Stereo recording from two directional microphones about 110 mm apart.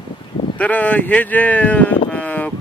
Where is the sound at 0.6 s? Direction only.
15° left (ahead or behind).